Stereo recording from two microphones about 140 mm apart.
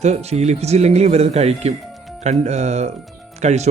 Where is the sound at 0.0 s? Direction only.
50° right (ahead or behind).